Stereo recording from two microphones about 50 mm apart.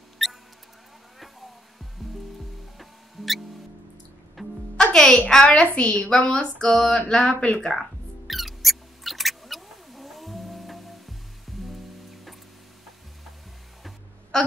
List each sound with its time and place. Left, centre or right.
0.2 s mouse: centre
2.8 s music: centre
4.7 s music: centre
5.3 s speech: left
6.1 s a sound: centre
7.1 s speech: centre
8.3 s cat: centre
11.6 s music: centre
14.3 s a sound: centre